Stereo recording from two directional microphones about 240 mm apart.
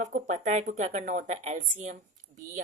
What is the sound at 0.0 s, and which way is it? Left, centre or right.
Speech, right.